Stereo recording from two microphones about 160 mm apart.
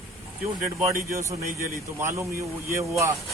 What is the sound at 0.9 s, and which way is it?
A man's voice, 20° right (ahead or behind).